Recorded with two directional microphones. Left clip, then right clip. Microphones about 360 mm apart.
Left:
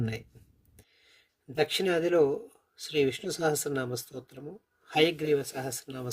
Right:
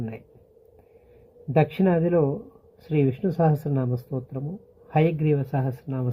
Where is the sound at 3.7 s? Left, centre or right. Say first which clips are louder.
Right 4 dB; left.